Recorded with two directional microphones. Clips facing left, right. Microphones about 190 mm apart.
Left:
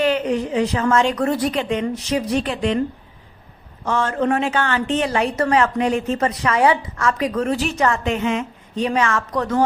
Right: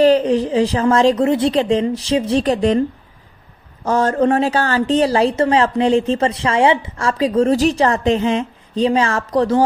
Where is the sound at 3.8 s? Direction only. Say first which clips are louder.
Right 5 dB; 40° right (ahead or behind).